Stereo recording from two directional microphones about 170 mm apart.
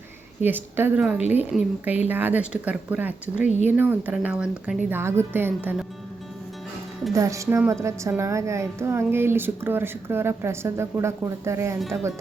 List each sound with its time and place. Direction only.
0.4 s a woman's voice: 10° right (ahead or behind)
7.1 s a woman's voice: 20° right (ahead or behind)